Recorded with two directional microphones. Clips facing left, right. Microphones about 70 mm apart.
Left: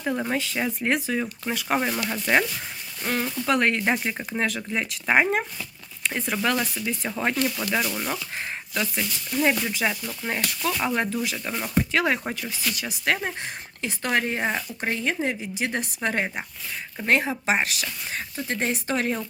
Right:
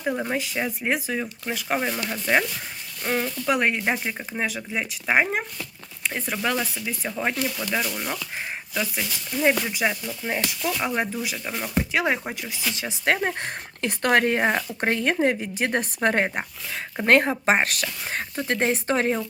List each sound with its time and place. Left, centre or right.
0.0 s speech: centre
3.1 s speech: centre
11.9 s speech: centre
13.2 s speech: right